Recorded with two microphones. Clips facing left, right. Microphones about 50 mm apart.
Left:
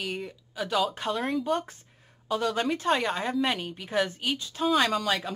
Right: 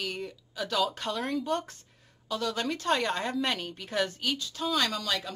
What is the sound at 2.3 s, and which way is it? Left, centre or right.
Speech, left.